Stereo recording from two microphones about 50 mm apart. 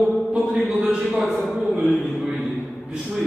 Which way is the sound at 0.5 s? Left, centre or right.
Centre.